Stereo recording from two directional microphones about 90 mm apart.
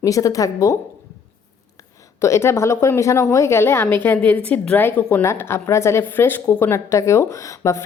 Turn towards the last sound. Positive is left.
turn(degrees=35)  # may be behind; listen again after turning